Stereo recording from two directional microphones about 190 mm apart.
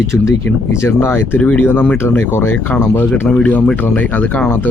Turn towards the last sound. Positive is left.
turn(degrees=10)  # may be behind; listen again after turning